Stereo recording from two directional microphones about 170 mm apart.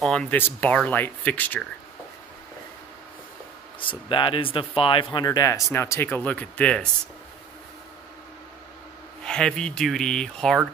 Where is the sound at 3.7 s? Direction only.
30° left (ahead or behind); by 6.8 s 5° left (ahead or behind).